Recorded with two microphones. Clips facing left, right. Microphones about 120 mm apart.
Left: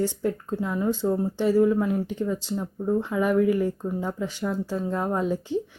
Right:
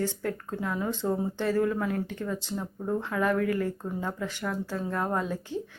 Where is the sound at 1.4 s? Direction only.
10° left (ahead or behind).